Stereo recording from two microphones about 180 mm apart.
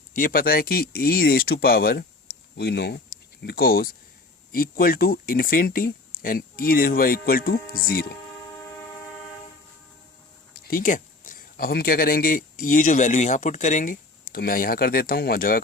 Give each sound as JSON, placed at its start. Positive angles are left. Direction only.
{"t": 0.2, "sound": "speech", "side_deg": 55}
{"t": 3.4, "sound": "speech", "side_deg": 55}
{"t": 10.5, "sound": "speech", "side_deg": 55}